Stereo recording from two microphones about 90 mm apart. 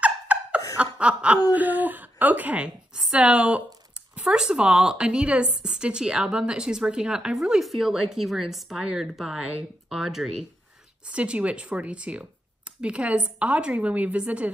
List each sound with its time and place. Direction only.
0.0 s laughter: 15° right (ahead or behind)
0.9 s chuckle: 15° right (ahead or behind)
1.5 s a woman's voice: 20° right (ahead or behind)